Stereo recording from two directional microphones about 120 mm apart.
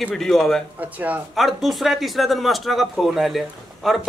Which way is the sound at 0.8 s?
15° right (ahead or behind).